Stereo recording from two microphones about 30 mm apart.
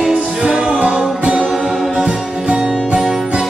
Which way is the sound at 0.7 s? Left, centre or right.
Right.